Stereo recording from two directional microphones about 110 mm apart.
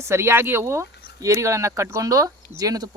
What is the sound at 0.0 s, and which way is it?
Speech, 25° right (ahead or behind).